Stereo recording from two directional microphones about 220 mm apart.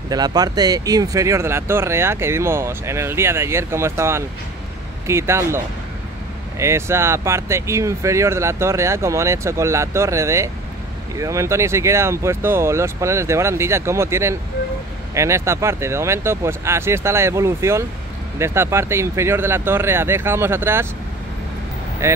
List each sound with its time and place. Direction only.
0.1 s speech: 15° right (ahead or behind)
6.6 s speech: 10° right (ahead or behind)
22.0 s speech: 10° right (ahead or behind)